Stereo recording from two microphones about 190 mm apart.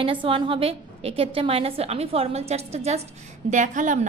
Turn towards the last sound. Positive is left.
turn(degrees=-40)  # may be behind; listen again after turning